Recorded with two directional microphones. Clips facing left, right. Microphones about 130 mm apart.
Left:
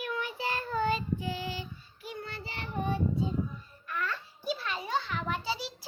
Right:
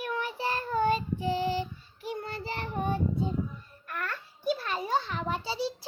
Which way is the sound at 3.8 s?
55° right (ahead or behind).